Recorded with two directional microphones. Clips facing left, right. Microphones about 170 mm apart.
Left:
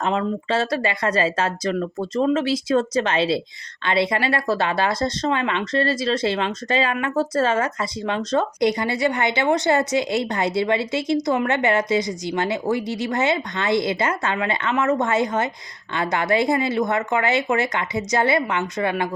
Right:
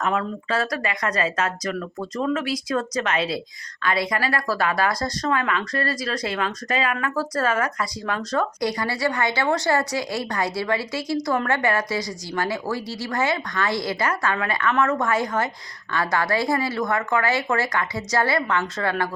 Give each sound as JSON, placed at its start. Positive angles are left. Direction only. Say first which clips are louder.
{"t": 0.0, "sound": "speech", "louder": "left 2 dB", "side_deg": 25}